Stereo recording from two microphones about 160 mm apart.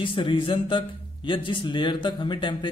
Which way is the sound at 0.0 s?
30° left (ahead or behind).